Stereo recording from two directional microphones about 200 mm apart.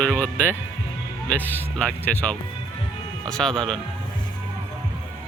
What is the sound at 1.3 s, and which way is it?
Speech, 5° left (ahead or behind).